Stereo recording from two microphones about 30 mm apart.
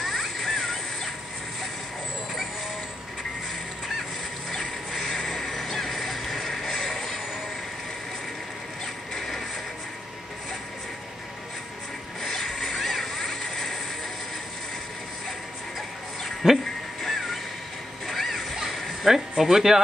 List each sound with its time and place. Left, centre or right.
0.0 s music: centre
4.5 s music: centre
6.9 s vehicle: centre
12.2 s mechanisms: centre
12.4 s music: centre
16.4 s speech: centre
17.0 s music: centre
19.0 s speech: centre